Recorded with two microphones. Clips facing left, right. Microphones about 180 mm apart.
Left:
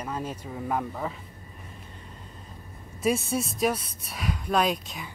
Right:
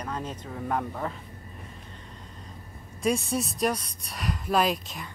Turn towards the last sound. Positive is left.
turn(degrees=0)  # may be behind; listen again after turning